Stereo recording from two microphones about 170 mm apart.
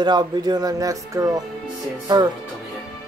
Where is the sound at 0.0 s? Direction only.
25° right (ahead or behind).